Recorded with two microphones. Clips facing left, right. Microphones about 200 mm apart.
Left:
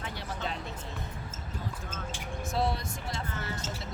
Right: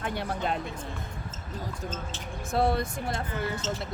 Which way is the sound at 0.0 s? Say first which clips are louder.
Right 6 dB; 55° right (ahead or behind).